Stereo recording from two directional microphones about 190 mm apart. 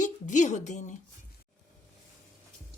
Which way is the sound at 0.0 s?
40° left (ahead or behind).